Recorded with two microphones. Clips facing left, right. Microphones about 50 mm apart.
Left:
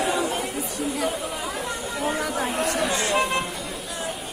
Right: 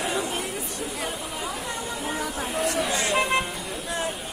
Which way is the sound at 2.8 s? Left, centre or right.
Centre.